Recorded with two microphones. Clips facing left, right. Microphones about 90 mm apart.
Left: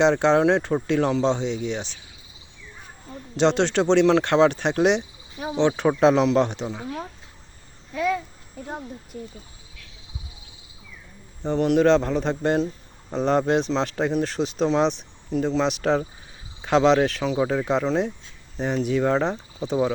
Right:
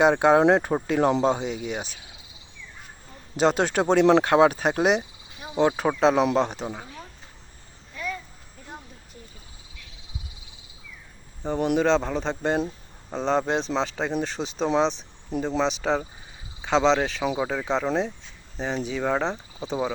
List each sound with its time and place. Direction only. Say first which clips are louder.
0.0 s speech: even; 10° right (ahead or behind)
3.3 s speech: left 2 dB; 5° right (ahead or behind)
7.9 s a sound: left 9 dB; 90° left
11.4 s speech: left 4 dB; 5° right (ahead or behind)